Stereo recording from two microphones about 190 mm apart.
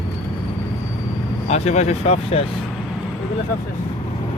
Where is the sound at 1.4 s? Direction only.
35° left (ahead or behind).